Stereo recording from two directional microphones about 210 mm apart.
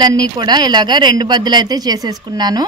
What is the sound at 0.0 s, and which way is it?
Speech, 20° right (ahead or behind).